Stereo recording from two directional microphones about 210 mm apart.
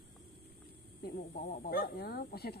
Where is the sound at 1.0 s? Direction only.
50° left (ahead or behind).